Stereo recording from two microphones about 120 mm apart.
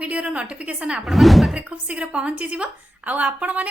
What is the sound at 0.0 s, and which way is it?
Speech, 10° right (ahead or behind).